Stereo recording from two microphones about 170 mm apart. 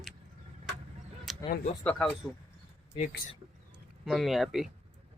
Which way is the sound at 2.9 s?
55° left (ahead or behind).